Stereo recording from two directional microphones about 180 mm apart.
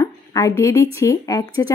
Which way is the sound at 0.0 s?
20° left (ahead or behind).